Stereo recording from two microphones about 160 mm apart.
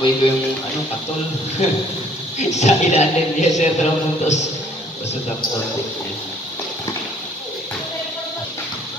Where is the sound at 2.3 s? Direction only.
45° left (ahead or behind).